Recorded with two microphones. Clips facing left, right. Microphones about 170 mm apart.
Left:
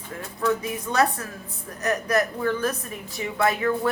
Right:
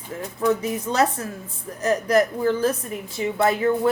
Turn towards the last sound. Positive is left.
turn(degrees=-25)  # may be behind; listen again after turning